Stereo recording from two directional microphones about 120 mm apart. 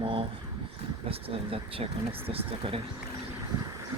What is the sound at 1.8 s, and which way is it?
Speech, 50° right (ahead or behind).